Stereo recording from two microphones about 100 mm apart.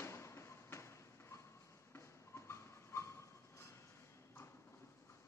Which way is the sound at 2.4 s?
25° left (ahead or behind).